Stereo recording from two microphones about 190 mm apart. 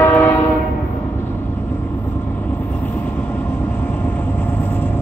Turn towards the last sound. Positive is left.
turn(degrees=10)  # may be behind; listen again after turning